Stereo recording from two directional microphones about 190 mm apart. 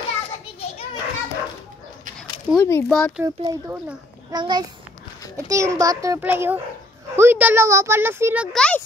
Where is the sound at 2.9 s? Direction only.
Centre (ahead or behind).